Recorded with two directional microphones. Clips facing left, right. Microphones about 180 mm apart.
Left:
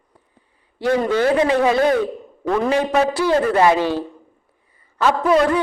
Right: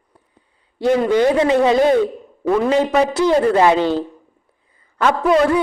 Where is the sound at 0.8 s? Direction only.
15° right (ahead or behind).